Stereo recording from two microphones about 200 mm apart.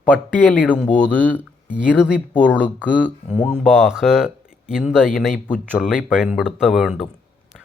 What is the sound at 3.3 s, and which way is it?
Speech, 35° left (ahead or behind).